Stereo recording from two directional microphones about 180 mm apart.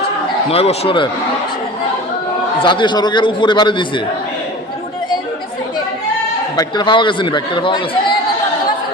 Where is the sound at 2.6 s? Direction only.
25° left (ahead or behind).